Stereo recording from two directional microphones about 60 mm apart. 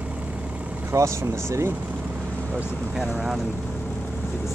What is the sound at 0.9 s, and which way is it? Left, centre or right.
Speech, right.